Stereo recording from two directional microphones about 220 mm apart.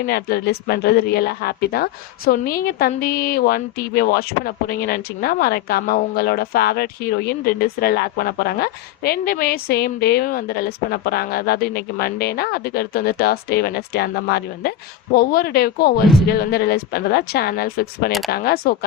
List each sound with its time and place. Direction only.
0.0 s a woman's voice: 45° left (ahead or behind)